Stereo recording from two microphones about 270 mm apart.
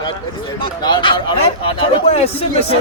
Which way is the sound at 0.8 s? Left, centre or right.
Centre.